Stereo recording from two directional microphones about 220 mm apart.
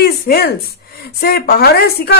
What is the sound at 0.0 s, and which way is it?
A woman's voice, 45° left (ahead or behind).